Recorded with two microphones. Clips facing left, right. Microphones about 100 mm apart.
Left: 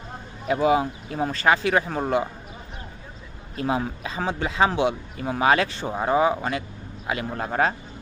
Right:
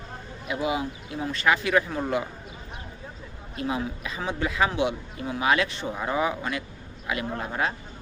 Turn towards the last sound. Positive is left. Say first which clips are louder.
# left 5 dB
turn(degrees=40)  # may be behind; listen again after turning